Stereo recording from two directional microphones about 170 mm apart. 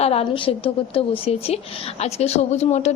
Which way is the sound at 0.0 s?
35° left (ahead or behind).